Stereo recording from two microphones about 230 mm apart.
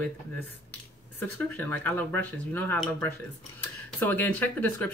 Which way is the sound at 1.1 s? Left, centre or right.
Centre.